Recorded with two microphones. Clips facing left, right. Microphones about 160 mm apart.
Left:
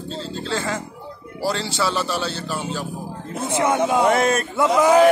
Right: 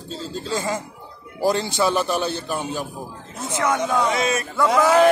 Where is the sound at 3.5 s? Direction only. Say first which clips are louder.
Left 2 dB; 25° left (ahead or behind).